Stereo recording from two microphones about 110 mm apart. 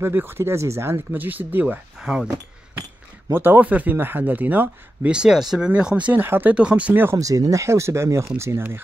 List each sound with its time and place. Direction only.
0.0 s speech: 20° right (ahead or behind)
3.3 s speech: 20° right (ahead or behind)
7.2 s speech: 30° right (ahead or behind)